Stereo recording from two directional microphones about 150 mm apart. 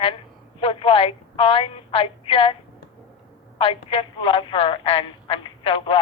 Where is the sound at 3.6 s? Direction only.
40° left (ahead or behind).